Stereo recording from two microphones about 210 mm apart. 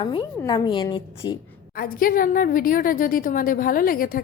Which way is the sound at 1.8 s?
45° left (ahead or behind).